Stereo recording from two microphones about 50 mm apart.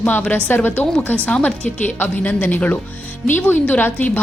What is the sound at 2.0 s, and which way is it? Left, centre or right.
A woman's voice, left.